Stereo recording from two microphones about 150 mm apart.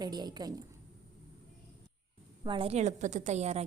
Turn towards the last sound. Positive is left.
turn(degrees=-45)  # may be behind; listen again after turning